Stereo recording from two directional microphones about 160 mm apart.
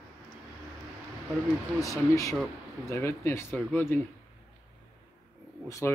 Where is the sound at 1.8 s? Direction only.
20° left (ahead or behind).